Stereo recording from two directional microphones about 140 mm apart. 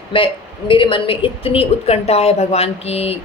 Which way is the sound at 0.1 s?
40° left (ahead or behind).